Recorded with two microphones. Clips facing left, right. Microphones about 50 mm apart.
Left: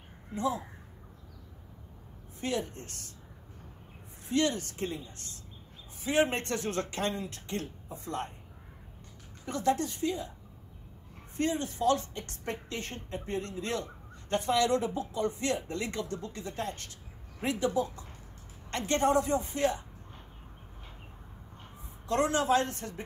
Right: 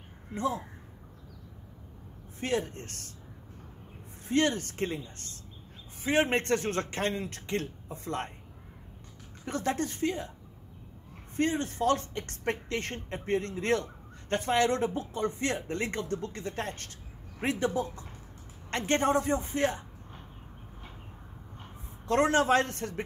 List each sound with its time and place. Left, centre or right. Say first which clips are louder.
0.3 s speech: even; right
2.4 s a man's voice: right 2 dB; right
4.3 s a man's voice: right 2 dB; right
9.5 s a man's voice: left 2 dB; right
11.3 s a man's voice: right 2 dB; right
22.0 s a man's voice: right 3 dB; right